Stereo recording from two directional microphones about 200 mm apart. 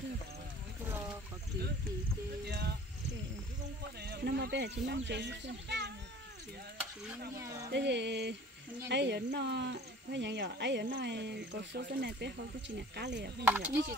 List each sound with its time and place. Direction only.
2.4 s a sound: 55° right (ahead or behind)
4.0 s speech: 55° right (ahead or behind)
7.7 s speech: 60° right (ahead or behind)
13.4 s speech: 10° right (ahead or behind)